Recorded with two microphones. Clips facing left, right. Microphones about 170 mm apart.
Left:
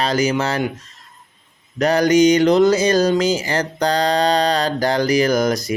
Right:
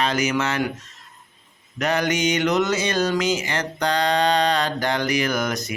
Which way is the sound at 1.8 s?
35° left (ahead or behind).